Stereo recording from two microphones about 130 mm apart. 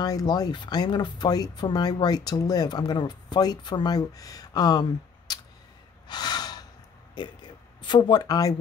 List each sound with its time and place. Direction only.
0.0 s speech: 30° left (ahead or behind)
5.3 s tick: 30° left (ahead or behind)
6.0 s gasp: 35° left (ahead or behind)
7.2 s speech: 35° left (ahead or behind)